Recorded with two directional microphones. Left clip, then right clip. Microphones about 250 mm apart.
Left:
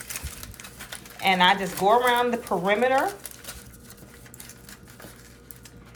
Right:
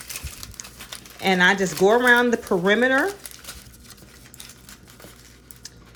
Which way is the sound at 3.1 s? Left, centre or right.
Centre.